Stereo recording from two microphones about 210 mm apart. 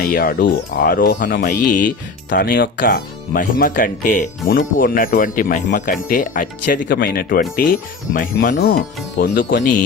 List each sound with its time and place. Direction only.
0.0 s speech: 45° left (ahead or behind)
9.1 s speech: 40° left (ahead or behind)